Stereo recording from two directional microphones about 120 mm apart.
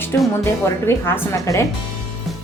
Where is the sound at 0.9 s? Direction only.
20° left (ahead or behind).